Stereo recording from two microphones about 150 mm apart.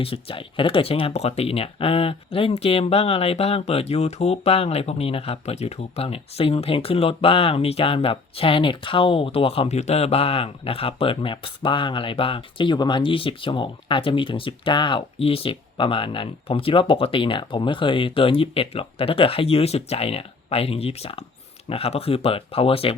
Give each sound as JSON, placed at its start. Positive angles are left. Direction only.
{"t": 0.0, "sound": "speech", "side_deg": 40}